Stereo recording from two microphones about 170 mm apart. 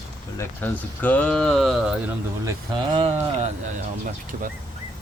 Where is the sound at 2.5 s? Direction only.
25° right (ahead or behind).